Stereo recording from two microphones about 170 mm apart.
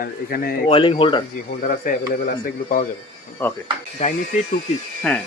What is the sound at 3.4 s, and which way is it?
Speech, 15° left (ahead or behind).